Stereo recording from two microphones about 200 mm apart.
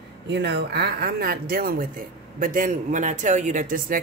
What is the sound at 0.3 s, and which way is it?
Speech, 55° right (ahead or behind).